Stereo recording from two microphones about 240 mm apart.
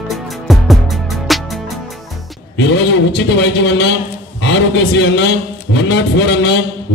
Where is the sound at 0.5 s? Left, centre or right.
Centre.